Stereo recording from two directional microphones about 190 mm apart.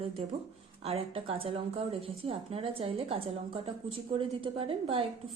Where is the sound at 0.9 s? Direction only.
30° right (ahead or behind).